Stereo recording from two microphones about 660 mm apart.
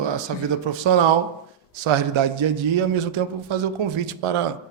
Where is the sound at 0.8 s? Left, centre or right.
Right.